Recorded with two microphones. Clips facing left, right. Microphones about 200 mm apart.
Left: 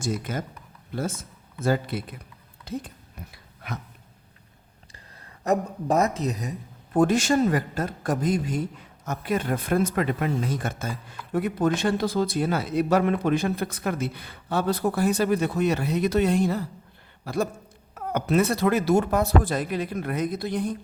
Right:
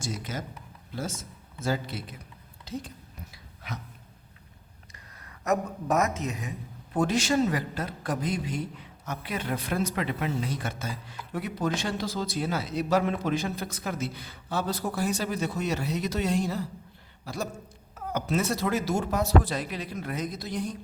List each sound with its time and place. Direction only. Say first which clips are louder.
0.0 s speech: left 6 dB; 55° left (ahead or behind)
3.3 s a sound: left 4 dB; 55° left (ahead or behind)
5.2 s speech: left 3 dB; 30° left (ahead or behind)
6.9 s speech: left 5 dB; 50° left (ahead or behind)